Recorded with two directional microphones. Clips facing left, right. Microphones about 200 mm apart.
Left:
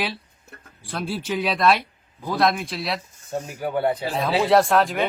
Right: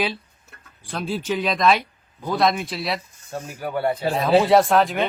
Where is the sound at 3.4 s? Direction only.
20° left (ahead or behind).